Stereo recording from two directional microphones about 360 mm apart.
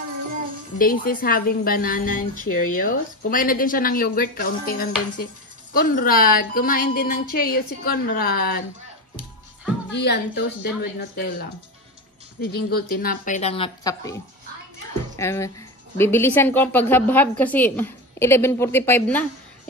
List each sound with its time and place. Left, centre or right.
0.7 s speech: left
9.9 s speech: left
12.4 s a woman's voice: left; by 19.7 s centre